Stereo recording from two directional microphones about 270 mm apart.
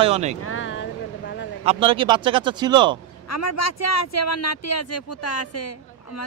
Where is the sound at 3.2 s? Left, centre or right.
Left.